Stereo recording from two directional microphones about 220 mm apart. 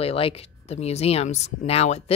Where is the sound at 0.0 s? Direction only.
25° left (ahead or behind).